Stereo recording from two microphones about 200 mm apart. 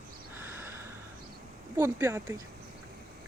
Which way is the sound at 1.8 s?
15° right (ahead or behind).